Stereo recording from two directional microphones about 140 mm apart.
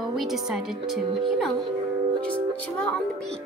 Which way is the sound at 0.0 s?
Centre (ahead or behind).